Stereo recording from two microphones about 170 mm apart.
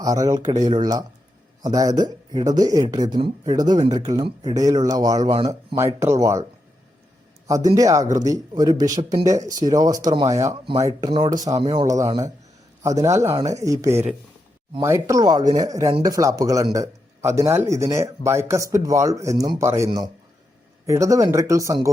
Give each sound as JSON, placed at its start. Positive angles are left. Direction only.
{"t": 0.0, "sound": "speech", "side_deg": -20}
{"t": 7.4, "sound": "a man's voice", "side_deg": -20}